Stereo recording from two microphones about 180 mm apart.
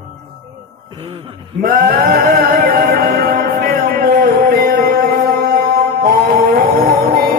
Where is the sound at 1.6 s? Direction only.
55° right (ahead or behind).